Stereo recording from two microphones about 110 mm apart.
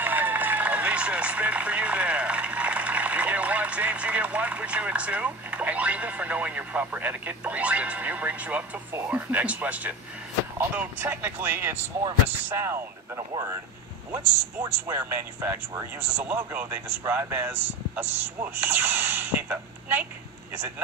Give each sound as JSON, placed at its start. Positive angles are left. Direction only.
{"t": 0.0, "sound": "speech", "side_deg": -15}
{"t": 14.7, "sound": "speech", "side_deg": -25}